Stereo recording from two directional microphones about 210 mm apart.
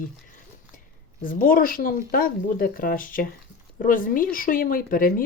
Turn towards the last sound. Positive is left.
turn(degrees=40)  # may be behind; listen again after turning